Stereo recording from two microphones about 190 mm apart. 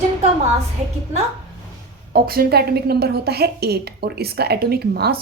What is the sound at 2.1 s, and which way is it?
A woman's voice, 50° right (ahead or behind).